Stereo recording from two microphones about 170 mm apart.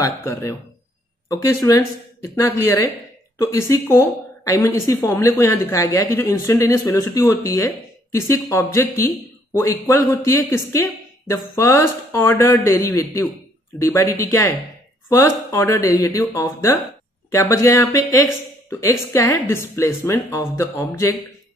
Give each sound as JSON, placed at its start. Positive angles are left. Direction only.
{"t": 0.2, "sound": "speech", "side_deg": 15}